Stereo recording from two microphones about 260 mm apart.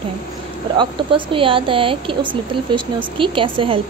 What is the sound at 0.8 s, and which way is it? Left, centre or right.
A woman's voice, centre.